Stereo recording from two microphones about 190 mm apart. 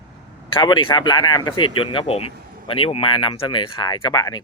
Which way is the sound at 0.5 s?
25° left (ahead or behind).